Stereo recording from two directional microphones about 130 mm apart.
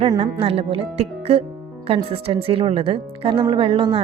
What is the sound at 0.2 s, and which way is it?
Speech, 45° right (ahead or behind).